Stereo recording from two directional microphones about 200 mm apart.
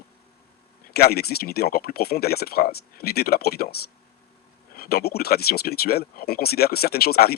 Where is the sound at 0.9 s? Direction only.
50° left (ahead or behind).